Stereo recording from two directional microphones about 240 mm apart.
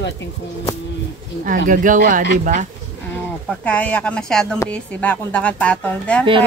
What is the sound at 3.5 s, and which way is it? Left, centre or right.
Speech, centre.